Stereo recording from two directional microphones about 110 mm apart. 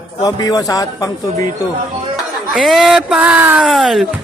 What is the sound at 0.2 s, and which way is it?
Speech, 35° left (ahead or behind).